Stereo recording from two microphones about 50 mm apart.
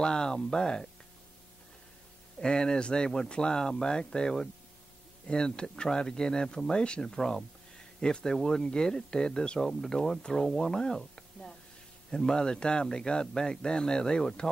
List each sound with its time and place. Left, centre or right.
0.0 s speech: centre
2.4 s speech: centre